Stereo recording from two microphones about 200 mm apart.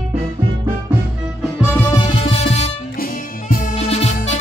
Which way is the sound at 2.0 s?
25° left (ahead or behind).